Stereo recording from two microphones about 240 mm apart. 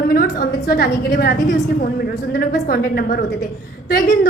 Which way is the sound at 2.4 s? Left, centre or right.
Left.